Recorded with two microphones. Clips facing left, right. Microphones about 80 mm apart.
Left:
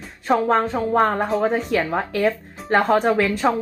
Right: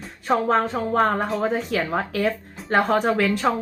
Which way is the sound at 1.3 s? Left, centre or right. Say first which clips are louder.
Left 3 dB; left.